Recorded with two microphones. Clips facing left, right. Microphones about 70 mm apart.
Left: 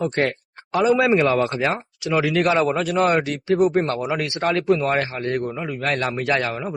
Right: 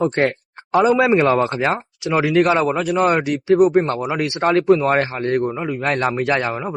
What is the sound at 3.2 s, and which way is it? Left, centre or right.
Speech, centre.